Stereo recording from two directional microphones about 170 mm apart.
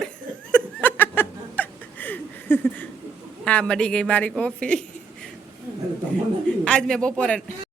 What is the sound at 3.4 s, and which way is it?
A woman's voice, 5° left (ahead or behind).